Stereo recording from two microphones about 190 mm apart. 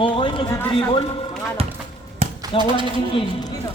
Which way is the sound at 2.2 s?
35° right (ahead or behind).